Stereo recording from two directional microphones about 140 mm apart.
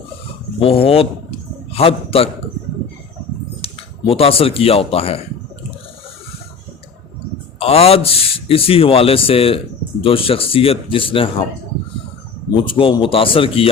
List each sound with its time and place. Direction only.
0.6 s a man's voice: 45° left (ahead or behind)
3.6 s speech: 40° left (ahead or behind)
7.6 s speech: 45° left (ahead or behind)
12.5 s speech: 40° left (ahead or behind)